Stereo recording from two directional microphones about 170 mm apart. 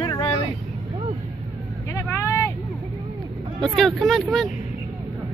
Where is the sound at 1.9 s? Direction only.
15° left (ahead or behind).